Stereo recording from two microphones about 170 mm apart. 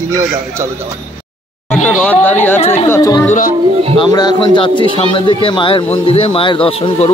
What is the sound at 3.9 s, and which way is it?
A man's voice, 25° left (ahead or behind).